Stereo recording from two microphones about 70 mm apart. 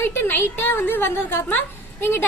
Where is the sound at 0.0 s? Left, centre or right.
Left.